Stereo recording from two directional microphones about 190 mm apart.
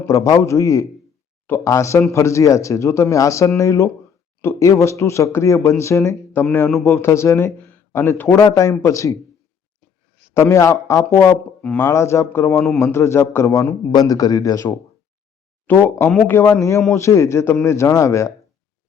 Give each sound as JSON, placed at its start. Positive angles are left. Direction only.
{"t": 0.0, "sound": "speech", "side_deg": 15}
{"t": 10.3, "sound": "speech", "side_deg": 15}
{"t": 12.6, "sound": "a man's voice", "side_deg": 0}
{"t": 12.9, "sound": "speech", "side_deg": 15}